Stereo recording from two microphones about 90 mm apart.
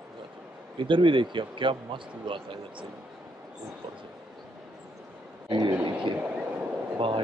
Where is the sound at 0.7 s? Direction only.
65° right (ahead or behind).